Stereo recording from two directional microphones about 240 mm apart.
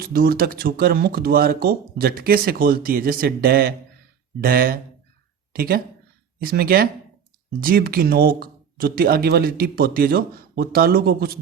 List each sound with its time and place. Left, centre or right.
0.0 s speech: right